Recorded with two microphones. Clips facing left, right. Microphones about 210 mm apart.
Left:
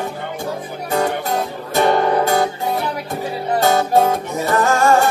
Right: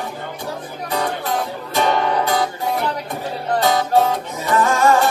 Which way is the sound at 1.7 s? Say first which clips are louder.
Left 3 dB; 45° left (ahead or behind).